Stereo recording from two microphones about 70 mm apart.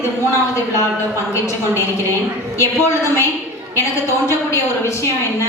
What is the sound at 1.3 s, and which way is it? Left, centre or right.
A woman's voice, left.